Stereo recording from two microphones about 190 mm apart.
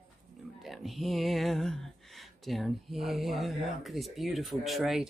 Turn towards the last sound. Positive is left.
turn(degrees=0)  # may be behind; listen again after turning